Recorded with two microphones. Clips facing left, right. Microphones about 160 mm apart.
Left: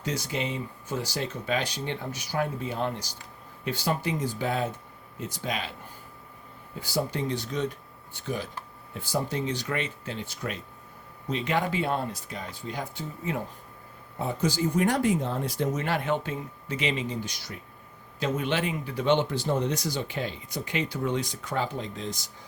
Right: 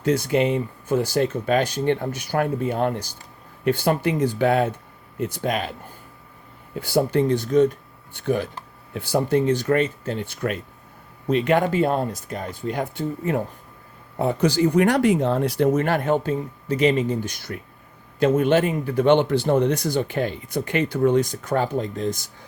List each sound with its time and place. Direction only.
0.0 s speech: 55° right (ahead or behind)
6.7 s speech: 60° right (ahead or behind)
8.1 s speech: 60° right (ahead or behind)
8.9 s speech: 70° right (ahead or behind); by 13.4 s 55° right (ahead or behind)
14.2 s speech: 65° right (ahead or behind); by 22.3 s 50° right (ahead or behind)